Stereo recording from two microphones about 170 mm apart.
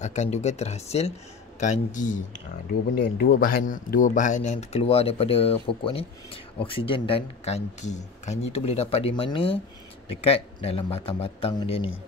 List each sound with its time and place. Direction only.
0.0 s a man's voice: 45° left (ahead or behind)
2.9 s speech: 65° left (ahead or behind); by 11.9 s 35° left (ahead or behind)